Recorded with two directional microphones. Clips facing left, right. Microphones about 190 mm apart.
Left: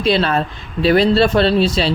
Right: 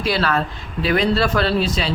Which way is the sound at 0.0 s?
25° left (ahead or behind).